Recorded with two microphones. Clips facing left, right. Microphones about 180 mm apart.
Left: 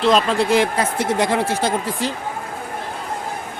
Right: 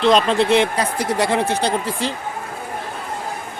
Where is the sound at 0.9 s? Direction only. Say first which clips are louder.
Left 1 dB; 20° left (ahead or behind).